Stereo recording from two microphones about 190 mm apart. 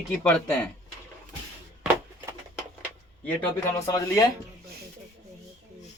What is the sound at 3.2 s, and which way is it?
Speech, 15° left (ahead or behind).